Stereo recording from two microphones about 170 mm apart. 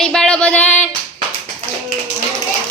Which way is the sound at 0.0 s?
5° left (ahead or behind).